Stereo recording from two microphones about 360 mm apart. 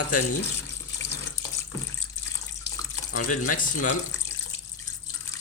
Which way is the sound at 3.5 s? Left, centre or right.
Left.